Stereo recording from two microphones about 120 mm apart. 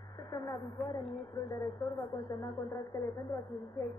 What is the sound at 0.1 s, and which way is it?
A woman's voice, 30° left (ahead or behind).